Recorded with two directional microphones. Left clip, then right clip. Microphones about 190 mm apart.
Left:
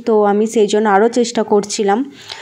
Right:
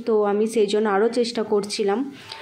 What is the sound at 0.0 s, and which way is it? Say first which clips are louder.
Speech: left 7 dB; 35° left (ahead or behind).